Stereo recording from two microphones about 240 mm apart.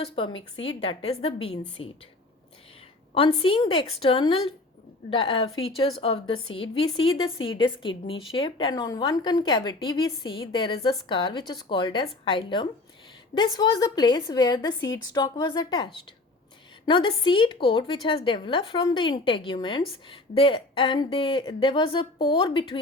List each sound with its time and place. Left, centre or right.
0.5 s a woman's voice: left
3.2 s a woman's voice: left
7.3 s a woman's voice: left
7.6 s a woman's voice: left